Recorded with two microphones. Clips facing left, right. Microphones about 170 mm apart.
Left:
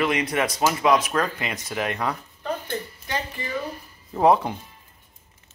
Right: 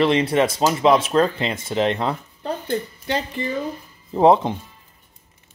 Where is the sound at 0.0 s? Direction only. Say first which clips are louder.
Right 6 dB; 30° right (ahead or behind).